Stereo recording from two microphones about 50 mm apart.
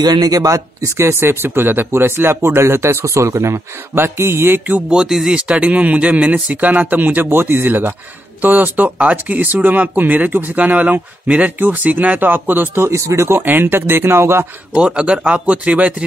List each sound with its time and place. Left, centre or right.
0.5 s speech: right
3.9 s speech: right
4.8 s speech: centre
5.6 s speech: right
7.2 s speech: right
12.2 s speech: right
12.8 s speech: right
14.7 s speech: centre